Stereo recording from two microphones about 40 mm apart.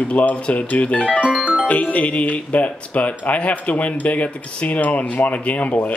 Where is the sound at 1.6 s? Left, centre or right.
Left.